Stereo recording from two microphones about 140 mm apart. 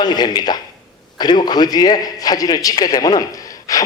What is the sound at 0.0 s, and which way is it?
A man's voice, 30° left (ahead or behind).